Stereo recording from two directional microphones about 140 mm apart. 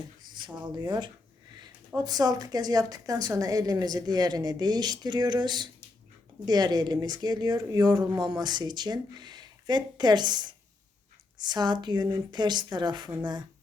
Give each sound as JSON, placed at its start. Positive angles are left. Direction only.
{"t": 0.3, "sound": "a woman's voice", "side_deg": -30}